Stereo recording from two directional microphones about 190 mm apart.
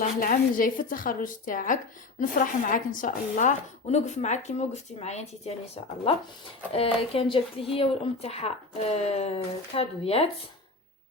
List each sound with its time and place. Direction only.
0.2 s speech: 50° left (ahead or behind); by 5.6 s 35° left (ahead or behind)
6.7 s speech: 30° left (ahead or behind)